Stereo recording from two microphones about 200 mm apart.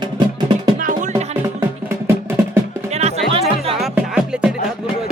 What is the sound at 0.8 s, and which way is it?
Music, 40° right (ahead or behind).